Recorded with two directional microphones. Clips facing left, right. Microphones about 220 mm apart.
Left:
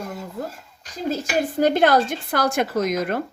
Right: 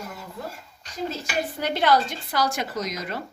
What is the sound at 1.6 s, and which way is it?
Speech, 50° left (ahead or behind).